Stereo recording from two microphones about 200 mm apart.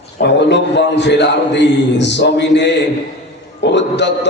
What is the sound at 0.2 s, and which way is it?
A man's voice, 60° left (ahead or behind).